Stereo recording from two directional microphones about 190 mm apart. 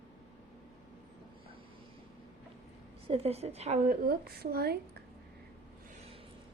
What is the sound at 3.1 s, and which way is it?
Speech, 35° right (ahead or behind).